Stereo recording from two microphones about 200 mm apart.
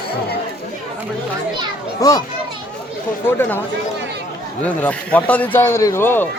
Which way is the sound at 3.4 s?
10° left (ahead or behind).